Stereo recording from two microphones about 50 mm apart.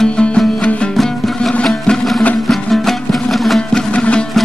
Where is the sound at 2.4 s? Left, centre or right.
Centre.